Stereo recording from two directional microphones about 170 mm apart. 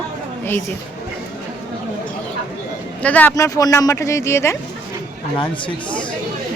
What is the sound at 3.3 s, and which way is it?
Speech, 20° left (ahead or behind).